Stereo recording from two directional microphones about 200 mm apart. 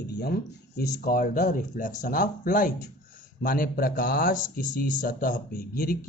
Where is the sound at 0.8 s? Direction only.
45° left (ahead or behind).